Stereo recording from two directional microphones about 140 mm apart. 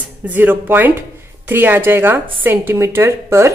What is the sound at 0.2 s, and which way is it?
A woman's voice, 15° right (ahead or behind).